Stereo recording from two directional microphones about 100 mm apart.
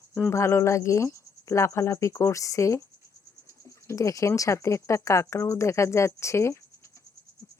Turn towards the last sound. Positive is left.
turn(degrees=30)  # may be behind; listen again after turning